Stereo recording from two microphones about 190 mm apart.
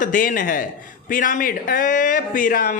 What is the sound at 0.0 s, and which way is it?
Speech, 45° left (ahead or behind).